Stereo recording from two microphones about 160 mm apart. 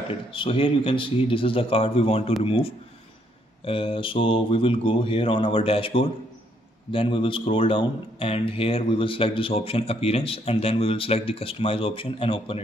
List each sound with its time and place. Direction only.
0.1 s speech: 35° left (ahead or behind)